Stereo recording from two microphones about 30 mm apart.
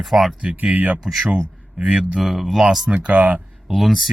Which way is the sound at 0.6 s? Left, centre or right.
Right.